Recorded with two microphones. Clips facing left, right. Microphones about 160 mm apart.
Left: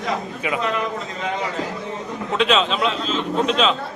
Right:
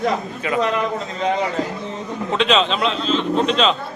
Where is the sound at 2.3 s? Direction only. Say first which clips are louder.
Right 1 dB; 5° left (ahead or behind).